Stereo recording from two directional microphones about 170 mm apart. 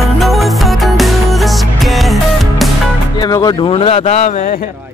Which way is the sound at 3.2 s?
25° left (ahead or behind).